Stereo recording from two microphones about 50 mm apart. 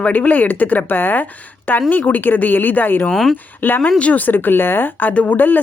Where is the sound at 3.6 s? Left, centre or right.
Left.